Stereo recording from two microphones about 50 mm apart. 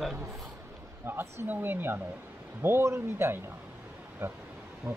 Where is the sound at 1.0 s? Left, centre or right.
Right.